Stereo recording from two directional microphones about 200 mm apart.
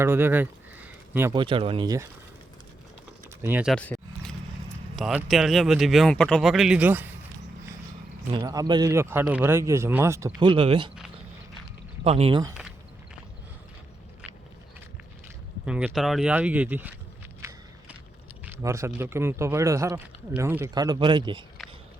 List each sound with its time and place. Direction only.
0.0 s speech: 10° right (ahead or behind)
1.3 s speech: 25° right (ahead or behind)
3.4 s speech: 5° right (ahead or behind)
3.8 s a sound: 5° left (ahead or behind)
4.9 s speech: centre (ahead or behind)
8.3 s speech: 20° right (ahead or behind)
10.5 s speech: 25° right (ahead or behind)
12.0 s speech: 30° right (ahead or behind)
15.6 s speech: 5° right (ahead or behind)
17.4 s walk: 15° right (ahead or behind)
18.4 s speech: 15° right (ahead or behind)